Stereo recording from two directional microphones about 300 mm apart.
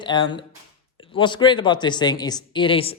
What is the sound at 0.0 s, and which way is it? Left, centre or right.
Speech, centre.